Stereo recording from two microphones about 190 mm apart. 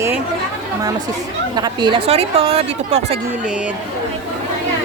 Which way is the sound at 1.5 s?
25° right (ahead or behind).